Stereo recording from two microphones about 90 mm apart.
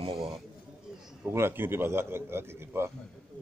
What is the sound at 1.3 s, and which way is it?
A man's voice, 25° right (ahead or behind).